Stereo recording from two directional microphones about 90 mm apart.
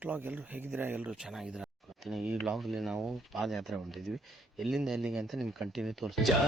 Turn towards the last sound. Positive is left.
turn(degrees=0)  # may be behind; listen again after turning